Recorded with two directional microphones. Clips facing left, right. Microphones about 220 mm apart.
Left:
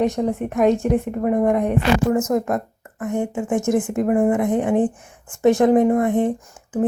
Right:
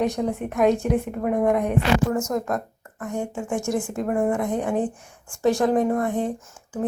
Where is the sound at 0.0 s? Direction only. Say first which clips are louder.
Left 3 dB; centre (ahead or behind).